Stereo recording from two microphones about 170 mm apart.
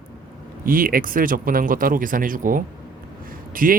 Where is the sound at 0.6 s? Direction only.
55° right (ahead or behind).